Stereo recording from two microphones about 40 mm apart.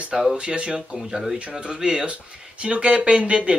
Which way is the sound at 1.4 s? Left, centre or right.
Right.